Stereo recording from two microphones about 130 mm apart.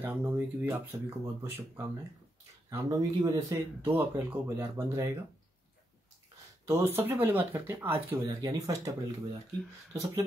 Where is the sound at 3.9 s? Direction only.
15° right (ahead or behind).